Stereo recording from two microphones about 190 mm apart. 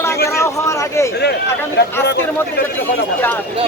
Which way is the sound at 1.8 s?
60° left (ahead or behind).